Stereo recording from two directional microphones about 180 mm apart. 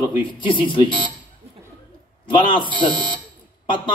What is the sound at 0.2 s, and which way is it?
Speech, 30° left (ahead or behind).